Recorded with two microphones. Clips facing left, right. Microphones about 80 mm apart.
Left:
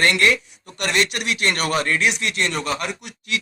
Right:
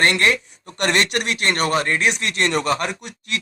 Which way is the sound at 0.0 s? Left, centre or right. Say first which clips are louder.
Even; right.